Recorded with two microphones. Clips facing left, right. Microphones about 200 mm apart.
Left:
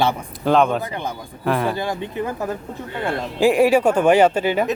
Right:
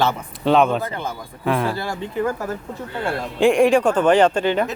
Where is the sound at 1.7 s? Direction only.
15° left (ahead or behind).